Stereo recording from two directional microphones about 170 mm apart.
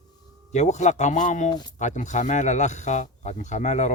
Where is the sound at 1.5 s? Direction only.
25° left (ahead or behind).